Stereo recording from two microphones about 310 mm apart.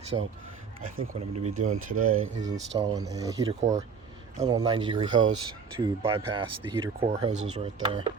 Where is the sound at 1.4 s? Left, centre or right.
Right.